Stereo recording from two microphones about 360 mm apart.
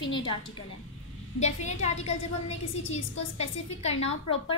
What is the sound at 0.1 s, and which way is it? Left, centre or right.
Speech, centre.